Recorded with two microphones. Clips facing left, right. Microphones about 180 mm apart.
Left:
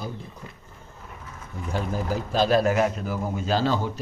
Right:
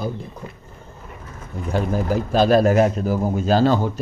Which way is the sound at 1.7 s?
60° right (ahead or behind).